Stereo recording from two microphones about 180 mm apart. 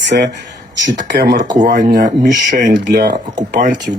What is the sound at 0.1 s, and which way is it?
Speech, 60° right (ahead or behind).